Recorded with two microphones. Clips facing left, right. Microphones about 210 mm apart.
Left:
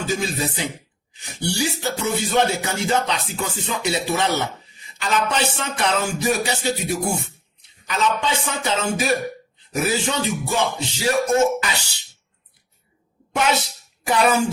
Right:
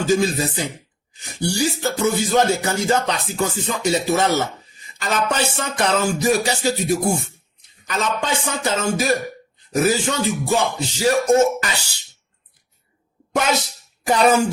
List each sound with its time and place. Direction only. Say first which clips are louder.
0.0 s music: right 6 dB; 40° right (ahead or behind)
14.0 s music: right 3 dB; 40° right (ahead or behind)